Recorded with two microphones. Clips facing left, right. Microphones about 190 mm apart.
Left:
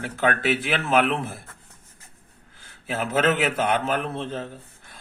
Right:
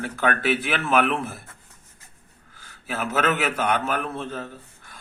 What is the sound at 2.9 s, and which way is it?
A man's voice, 25° left (ahead or behind).